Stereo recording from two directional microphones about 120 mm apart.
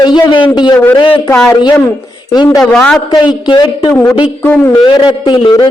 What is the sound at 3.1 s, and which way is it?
Speech, 40° left (ahead or behind).